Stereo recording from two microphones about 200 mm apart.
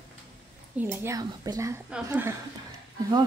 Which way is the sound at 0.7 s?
10° right (ahead or behind).